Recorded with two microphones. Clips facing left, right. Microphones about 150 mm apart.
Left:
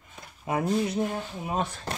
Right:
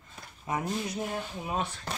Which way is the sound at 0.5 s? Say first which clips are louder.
Left 7 dB; 30° left (ahead or behind).